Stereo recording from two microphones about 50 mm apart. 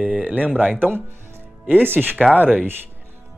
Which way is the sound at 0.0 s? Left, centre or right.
Right.